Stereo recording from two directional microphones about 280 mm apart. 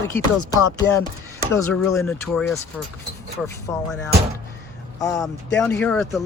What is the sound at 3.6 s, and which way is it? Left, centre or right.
Speech, centre.